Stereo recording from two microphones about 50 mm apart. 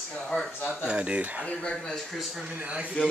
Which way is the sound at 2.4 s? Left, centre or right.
Right.